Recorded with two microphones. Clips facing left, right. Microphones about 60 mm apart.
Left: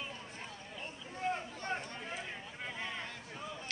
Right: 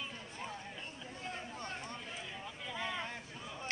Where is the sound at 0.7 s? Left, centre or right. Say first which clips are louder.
Left 3 dB; left.